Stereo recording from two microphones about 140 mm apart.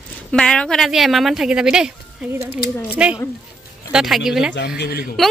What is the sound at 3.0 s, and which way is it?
A woman's voice, 10° right (ahead or behind).